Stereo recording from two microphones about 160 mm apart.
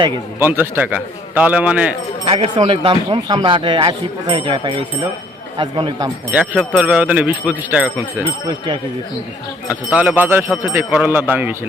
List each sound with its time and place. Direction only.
0.3 s speech: 15° right (ahead or behind)
2.2 s speech: 35° right (ahead or behind)
6.3 s speech: 10° right (ahead or behind)
8.4 s speech: 25° right (ahead or behind)
9.6 s speech: 5° right (ahead or behind)